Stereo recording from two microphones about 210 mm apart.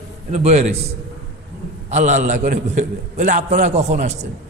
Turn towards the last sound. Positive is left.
turn(degrees=-35)  # may be behind; listen again after turning